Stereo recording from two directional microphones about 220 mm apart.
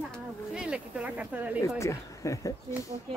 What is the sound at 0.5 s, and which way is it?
Speech, 5° right (ahead or behind).